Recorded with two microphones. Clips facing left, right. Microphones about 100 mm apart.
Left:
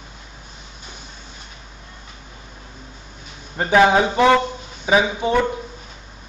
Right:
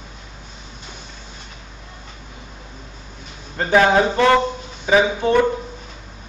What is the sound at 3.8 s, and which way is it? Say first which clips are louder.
A man's voice: left 1 dB; 15° left (ahead or behind).